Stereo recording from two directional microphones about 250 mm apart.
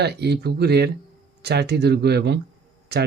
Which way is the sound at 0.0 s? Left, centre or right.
Right.